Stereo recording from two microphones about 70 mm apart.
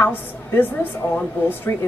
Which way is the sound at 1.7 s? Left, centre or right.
Left.